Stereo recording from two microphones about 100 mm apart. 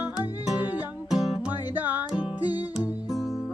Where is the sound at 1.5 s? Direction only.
20° right (ahead or behind).